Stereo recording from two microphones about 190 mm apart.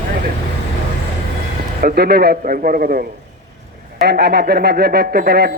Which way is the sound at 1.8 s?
55° right (ahead or behind).